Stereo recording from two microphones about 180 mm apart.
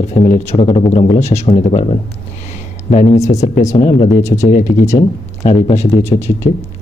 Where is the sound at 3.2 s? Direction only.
40° left (ahead or behind).